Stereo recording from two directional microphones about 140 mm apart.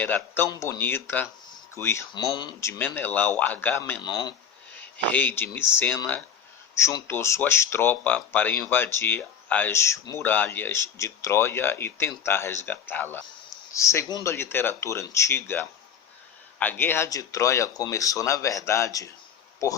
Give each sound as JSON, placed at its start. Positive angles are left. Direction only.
{"t": 0.0, "sound": "speech", "side_deg": 15}
{"t": 2.1, "sound": "speech", "side_deg": 30}
{"t": 2.6, "sound": "speech", "side_deg": 15}
{"t": 4.0, "sound": "speech", "side_deg": 30}
{"t": 5.0, "sound": "speech", "side_deg": 10}